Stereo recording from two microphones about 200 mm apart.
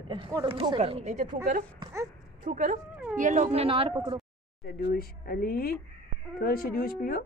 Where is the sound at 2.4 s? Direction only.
40° right (ahead or behind).